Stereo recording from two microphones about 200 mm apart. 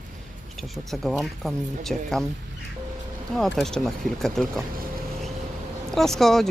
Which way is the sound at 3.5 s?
Centre (ahead or behind).